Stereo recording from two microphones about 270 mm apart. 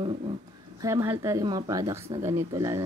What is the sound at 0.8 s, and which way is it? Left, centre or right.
Speech, centre.